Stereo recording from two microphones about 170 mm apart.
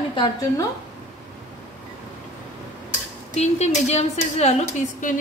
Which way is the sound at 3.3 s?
40° left (ahead or behind).